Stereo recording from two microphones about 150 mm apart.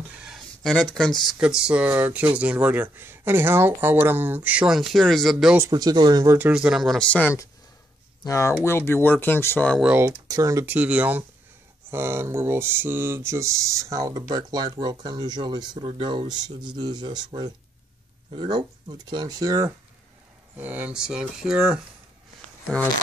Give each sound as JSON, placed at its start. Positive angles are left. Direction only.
{"t": 0.1, "sound": "a sound", "side_deg": -5}
{"t": 1.4, "sound": "speech", "side_deg": -5}
{"t": 5.6, "sound": "speech", "side_deg": -25}
{"t": 6.3, "sound": "speech", "side_deg": -10}
{"t": 9.8, "sound": "speech", "side_deg": -10}
{"t": 20.5, "sound": "speech", "side_deg": -10}